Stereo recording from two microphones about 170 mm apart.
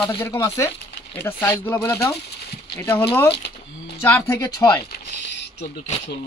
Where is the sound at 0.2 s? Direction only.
15° left (ahead or behind).